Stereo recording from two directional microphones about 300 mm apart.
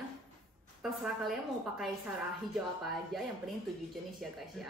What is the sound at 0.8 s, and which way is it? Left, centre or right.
Speech, centre.